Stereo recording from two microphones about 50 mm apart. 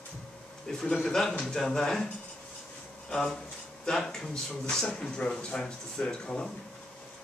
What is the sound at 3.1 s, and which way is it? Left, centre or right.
Speech, centre.